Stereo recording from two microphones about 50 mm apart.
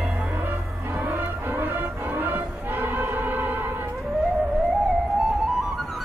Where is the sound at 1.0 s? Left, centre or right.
Right.